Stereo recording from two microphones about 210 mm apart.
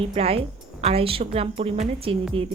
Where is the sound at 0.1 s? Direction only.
30° right (ahead or behind).